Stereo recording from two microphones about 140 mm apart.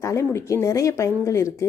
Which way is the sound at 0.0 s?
20° left (ahead or behind).